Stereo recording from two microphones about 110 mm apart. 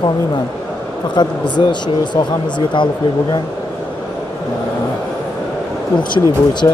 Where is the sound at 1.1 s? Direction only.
40° left (ahead or behind).